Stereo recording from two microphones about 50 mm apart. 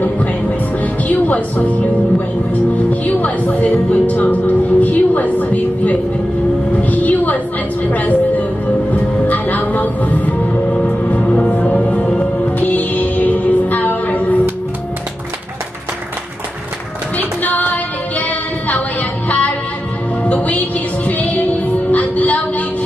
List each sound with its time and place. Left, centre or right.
0.0 s music: left
1.0 s speech: left
6.8 s music: left
7.8 s a sound: left
8.9 s music: left
17.2 s music: left